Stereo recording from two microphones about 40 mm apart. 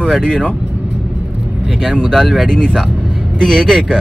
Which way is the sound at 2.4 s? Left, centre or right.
Left.